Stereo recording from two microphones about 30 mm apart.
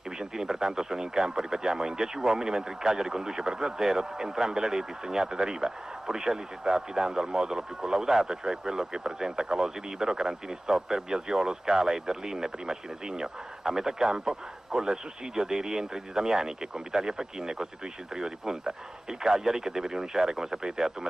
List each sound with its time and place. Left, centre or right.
0.4 s speech: centre